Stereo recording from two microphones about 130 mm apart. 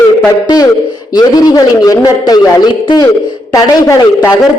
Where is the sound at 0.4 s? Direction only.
30° left (ahead or behind).